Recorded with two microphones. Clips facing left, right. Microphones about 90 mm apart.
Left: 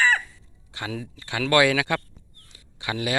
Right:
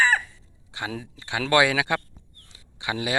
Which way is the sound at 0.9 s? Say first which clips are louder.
Left 2 dB; 20° right (ahead or behind).